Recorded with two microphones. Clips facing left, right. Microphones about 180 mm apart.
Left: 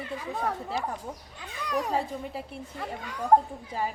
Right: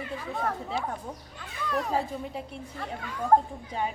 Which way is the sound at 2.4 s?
5° left (ahead or behind).